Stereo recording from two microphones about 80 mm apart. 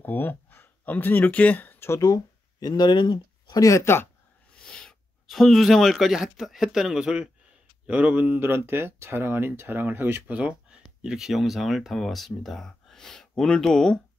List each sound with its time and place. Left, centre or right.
0.0 s speech: left
2.0 s speech: left
3.5 s speech: left
3.8 s speech: left
4.5 s speech: centre; by 10.3 s right
10.3 s speech: centre